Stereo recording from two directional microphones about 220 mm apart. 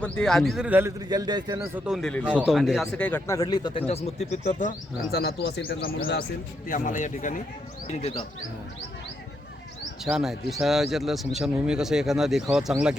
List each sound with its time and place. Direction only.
0.0 s a man's voice: 5° left (ahead or behind); by 7.4 s 35° left (ahead or behind)
10.0 s speech: centre (ahead or behind)